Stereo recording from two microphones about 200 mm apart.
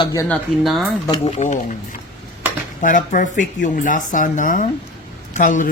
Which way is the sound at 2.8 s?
40° left (ahead or behind).